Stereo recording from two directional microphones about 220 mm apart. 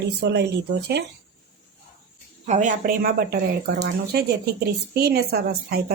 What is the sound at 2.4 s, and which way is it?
A woman's voice, 35° right (ahead or behind).